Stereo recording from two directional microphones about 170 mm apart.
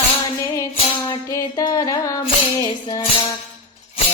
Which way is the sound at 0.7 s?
30° left (ahead or behind).